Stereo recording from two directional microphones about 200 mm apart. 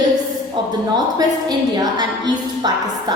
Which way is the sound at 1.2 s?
20° right (ahead or behind).